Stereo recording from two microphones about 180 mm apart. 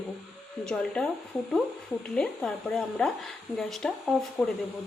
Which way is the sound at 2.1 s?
5° left (ahead or behind).